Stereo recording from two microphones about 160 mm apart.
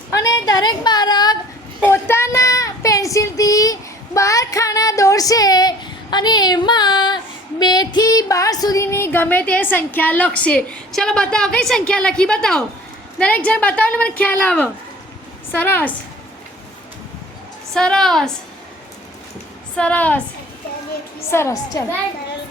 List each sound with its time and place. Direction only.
0.1 s a woman's voice: 20° left (ahead or behind)
1.8 s child singing: 15° left (ahead or behind)
7.6 s female singing: 25° left (ahead or behind)
17.7 s a woman's voice: 5° left (ahead or behind)
19.7 s female singing: 10° left (ahead or behind)
21.2 s female singing: 15° left (ahead or behind)